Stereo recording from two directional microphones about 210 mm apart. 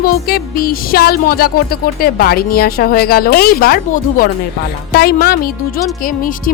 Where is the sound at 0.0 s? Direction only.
45° left (ahead or behind).